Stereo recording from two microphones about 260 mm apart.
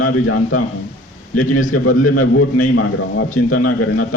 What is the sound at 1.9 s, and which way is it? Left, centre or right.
A man's voice, left.